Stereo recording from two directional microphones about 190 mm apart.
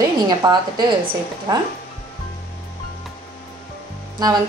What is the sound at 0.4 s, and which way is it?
A woman's voice, 20° right (ahead or behind).